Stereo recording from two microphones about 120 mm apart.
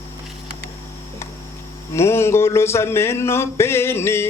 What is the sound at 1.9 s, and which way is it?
Speech, 20° left (ahead or behind).